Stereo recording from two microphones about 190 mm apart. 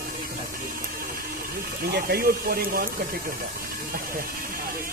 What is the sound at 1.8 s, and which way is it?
Speech, 55° right (ahead or behind).